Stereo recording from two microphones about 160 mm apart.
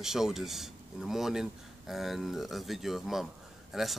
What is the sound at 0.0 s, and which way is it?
Speech, 5° right (ahead or behind).